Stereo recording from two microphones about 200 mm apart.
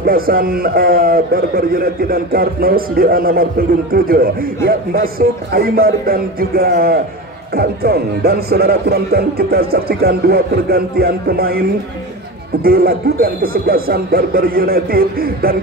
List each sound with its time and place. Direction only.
0.0 s a man's voice: 45° right (ahead or behind)
12.6 s a man's voice: 50° right (ahead or behind)